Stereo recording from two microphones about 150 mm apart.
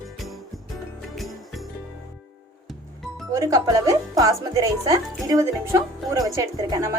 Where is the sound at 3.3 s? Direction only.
25° right (ahead or behind).